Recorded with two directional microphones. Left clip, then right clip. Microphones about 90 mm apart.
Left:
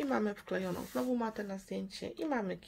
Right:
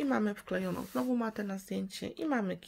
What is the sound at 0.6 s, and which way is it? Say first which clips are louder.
Speech: right 1 dB; 40° right (ahead or behind).